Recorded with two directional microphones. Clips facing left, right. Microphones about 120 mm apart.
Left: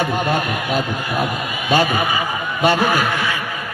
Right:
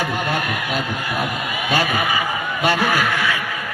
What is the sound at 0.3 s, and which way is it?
Speech, 25° left (ahead or behind).